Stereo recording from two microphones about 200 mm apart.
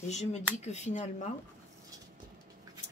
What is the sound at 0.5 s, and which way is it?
Speech, 35° left (ahead or behind).